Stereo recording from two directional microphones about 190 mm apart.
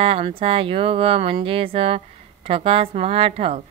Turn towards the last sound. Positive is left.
turn(degrees=-30)  # may be behind; listen again after turning